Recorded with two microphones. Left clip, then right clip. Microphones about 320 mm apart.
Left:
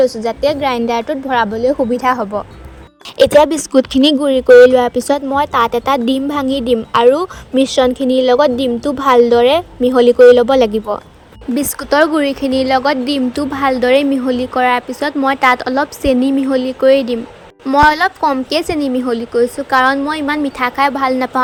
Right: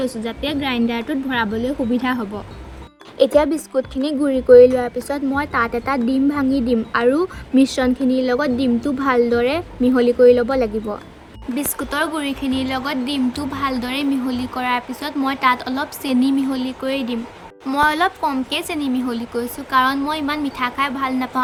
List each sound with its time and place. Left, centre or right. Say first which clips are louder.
0.0 s speech: left 11 dB; centre
3.4 s speech: left 8 dB; left